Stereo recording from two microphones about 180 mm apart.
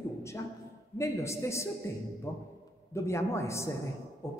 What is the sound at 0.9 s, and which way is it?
A woman's voice, 15° left (ahead or behind).